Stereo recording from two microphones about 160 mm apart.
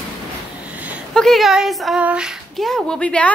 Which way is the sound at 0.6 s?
10° right (ahead or behind).